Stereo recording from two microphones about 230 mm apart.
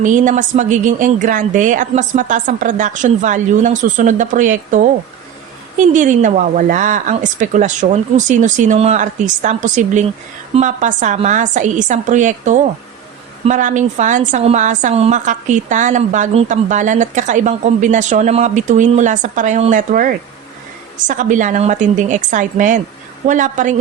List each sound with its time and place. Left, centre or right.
0.0 s a woman's voice: right